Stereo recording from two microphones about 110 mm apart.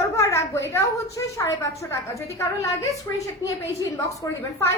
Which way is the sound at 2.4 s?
30° left (ahead or behind).